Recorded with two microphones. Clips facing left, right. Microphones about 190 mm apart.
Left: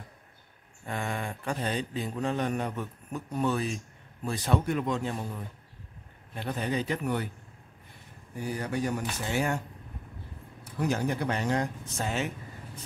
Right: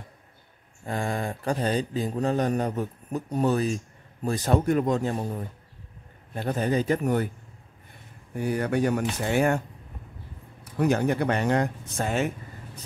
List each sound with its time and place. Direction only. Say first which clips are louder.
0.8 s a man's voice: right 5 dB; 35° right (ahead or behind)
8.4 s speech: right 7 dB; 60° right (ahead or behind)
10.8 s speech: right 6 dB; 60° right (ahead or behind)